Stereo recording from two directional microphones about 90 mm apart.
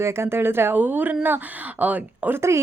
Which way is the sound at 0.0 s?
30° right (ahead or behind).